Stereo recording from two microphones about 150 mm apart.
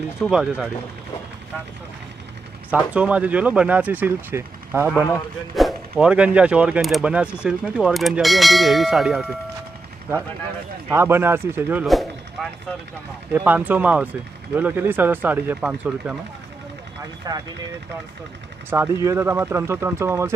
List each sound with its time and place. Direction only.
0.2 s speech: 5° right (ahead or behind)
2.6 s speech: 10° right (ahead or behind)
5.5 s speech: centre (ahead or behind)
10.9 s speech: 15° right (ahead or behind)
11.9 s a sound: centre (ahead or behind)
13.3 s speech: 10° right (ahead or behind)
17.2 s speech: 25° right (ahead or behind)
18.7 s speech: 15° right (ahead or behind)